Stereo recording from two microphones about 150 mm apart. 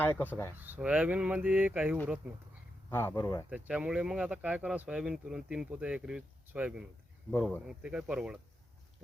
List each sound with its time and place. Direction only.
0.0 s speech: 10° left (ahead or behind)
0.5 s speech: 10° right (ahead or behind)
2.9 s speech: 15° left (ahead or behind)
3.5 s speech: 10° right (ahead or behind)
7.3 s speech: 10° left (ahead or behind)
7.7 s speech: 5° right (ahead or behind)